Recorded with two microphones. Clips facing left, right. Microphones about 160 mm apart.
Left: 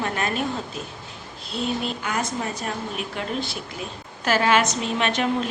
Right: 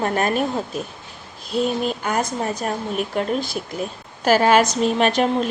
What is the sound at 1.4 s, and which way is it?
Speech, 45° right (ahead or behind).